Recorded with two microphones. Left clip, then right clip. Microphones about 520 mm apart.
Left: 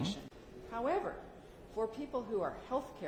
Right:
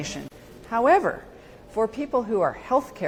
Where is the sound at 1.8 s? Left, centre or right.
Right.